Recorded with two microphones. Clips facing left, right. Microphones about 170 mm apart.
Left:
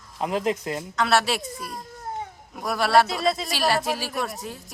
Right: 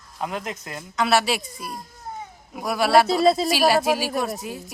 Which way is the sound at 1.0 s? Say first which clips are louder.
Right 2 dB; 5° right (ahead or behind).